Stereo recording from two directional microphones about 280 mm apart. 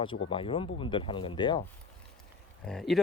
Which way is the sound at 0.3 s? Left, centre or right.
Centre.